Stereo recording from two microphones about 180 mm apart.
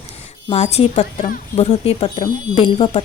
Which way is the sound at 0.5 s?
35° left (ahead or behind).